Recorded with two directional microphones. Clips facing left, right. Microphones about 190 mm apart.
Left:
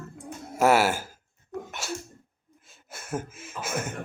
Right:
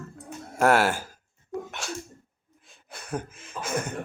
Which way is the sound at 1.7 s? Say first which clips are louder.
Left 1 dB; 5° left (ahead or behind).